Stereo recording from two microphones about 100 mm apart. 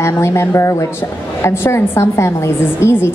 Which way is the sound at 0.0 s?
30° left (ahead or behind).